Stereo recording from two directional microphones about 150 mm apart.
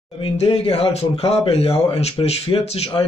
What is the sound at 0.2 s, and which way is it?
Speech, 40° left (ahead or behind).